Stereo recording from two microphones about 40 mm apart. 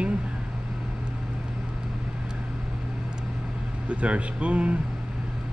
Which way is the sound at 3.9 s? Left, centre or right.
Right.